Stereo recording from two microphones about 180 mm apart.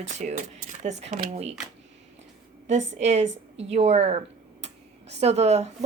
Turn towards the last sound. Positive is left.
turn(degrees=-35)  # may be behind; listen again after turning